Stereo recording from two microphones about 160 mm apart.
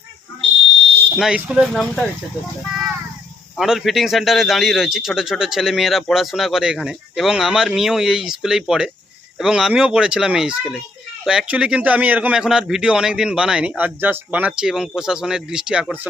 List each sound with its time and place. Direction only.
1.1 s speech: 5° right (ahead or behind)
3.6 s speech: centre (ahead or behind)